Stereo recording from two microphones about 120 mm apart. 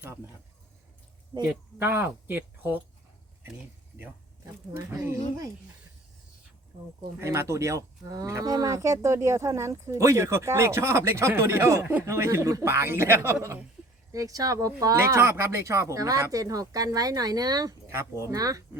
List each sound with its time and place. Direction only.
1.5 s speech: 20° right (ahead or behind)
4.8 s speech: 25° right (ahead or behind)
7.2 s speech: 20° right (ahead or behind)